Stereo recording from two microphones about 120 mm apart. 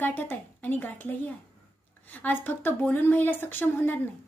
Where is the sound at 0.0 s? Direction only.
15° left (ahead or behind).